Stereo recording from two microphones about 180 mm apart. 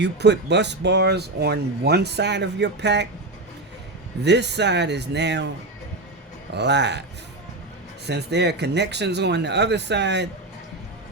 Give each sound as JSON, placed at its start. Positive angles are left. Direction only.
{"t": 0.0, "sound": "speech", "side_deg": -70}
{"t": 4.2, "sound": "speech", "side_deg": -70}
{"t": 6.5, "sound": "speech", "side_deg": -70}
{"t": 8.0, "sound": "speech", "side_deg": -70}